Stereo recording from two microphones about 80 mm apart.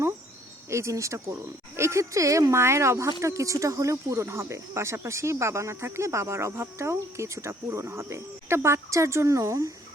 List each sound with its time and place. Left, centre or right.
0.7 s speech: right